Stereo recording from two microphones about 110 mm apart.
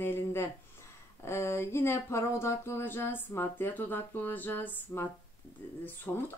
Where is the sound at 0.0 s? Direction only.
20° left (ahead or behind).